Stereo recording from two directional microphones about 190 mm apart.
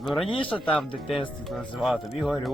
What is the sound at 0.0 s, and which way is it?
Speech, centre (ahead or behind).